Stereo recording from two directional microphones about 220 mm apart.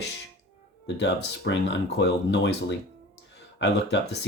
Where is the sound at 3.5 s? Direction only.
55° left (ahead or behind).